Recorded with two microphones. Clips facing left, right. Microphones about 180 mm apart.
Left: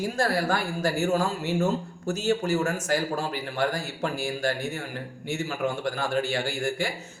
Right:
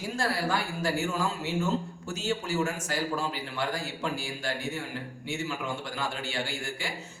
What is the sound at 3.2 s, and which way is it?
A man's voice, 50° left (ahead or behind).